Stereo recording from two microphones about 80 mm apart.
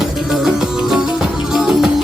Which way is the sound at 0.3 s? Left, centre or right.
Centre.